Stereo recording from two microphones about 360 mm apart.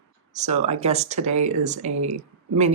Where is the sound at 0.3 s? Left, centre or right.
Centre.